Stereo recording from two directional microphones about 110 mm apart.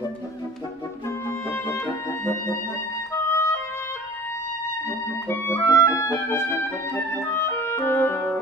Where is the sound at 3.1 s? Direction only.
25° left (ahead or behind).